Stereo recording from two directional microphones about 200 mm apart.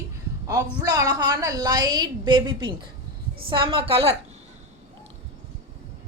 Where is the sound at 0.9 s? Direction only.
20° right (ahead or behind).